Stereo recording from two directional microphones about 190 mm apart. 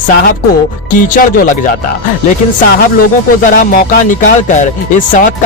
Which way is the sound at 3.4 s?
45° left (ahead or behind).